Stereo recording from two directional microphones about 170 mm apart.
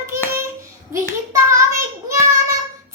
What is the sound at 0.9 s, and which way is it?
Hands, 15° right (ahead or behind).